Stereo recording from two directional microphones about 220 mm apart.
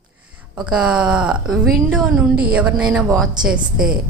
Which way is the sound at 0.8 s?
5° right (ahead or behind).